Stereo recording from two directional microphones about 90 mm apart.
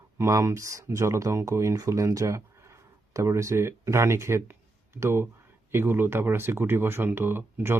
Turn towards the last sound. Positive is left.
turn(degrees=-25)  # may be behind; listen again after turning